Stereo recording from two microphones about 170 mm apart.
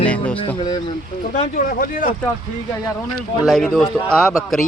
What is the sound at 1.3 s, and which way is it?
Speech, 50° left (ahead or behind).